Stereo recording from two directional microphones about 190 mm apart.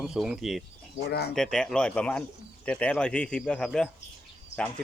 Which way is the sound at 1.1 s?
60° left (ahead or behind).